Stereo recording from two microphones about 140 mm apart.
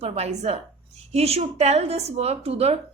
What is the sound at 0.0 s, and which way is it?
A woman's voice, 50° right (ahead or behind).